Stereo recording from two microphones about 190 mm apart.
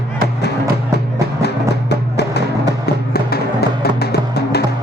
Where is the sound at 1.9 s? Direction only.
60° left (ahead or behind).